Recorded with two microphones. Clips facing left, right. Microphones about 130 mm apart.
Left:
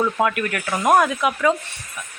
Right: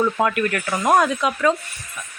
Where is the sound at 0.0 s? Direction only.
5° left (ahead or behind).